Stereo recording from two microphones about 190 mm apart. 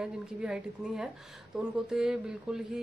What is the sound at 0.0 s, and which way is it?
Speech, 5° right (ahead or behind).